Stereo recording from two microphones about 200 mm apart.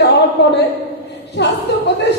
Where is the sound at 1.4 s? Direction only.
60° left (ahead or behind).